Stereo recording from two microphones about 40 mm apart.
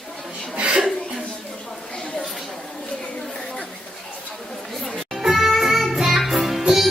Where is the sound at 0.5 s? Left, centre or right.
Right.